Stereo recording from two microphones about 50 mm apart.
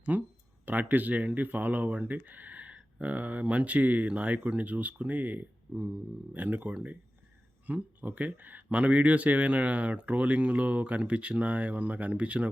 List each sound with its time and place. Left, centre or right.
0.1 s speech: right
8.7 s speech: right